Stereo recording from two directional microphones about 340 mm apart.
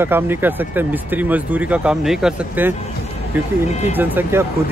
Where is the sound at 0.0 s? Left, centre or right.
Centre.